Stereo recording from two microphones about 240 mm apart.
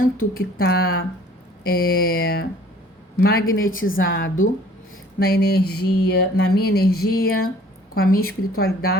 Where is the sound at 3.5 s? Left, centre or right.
Left.